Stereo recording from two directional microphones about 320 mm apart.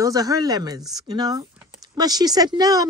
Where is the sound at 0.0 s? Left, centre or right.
Centre.